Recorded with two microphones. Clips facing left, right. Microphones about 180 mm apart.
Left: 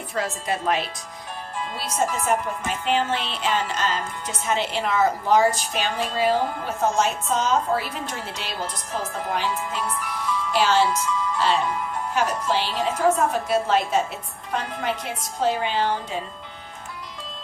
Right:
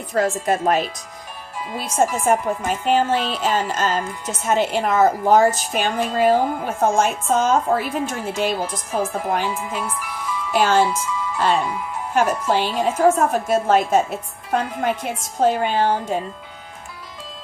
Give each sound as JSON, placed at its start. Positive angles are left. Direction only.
{"t": 0.1, "sound": "a woman's voice", "side_deg": -50}
{"t": 12.1, "sound": "a woman's voice", "side_deg": -50}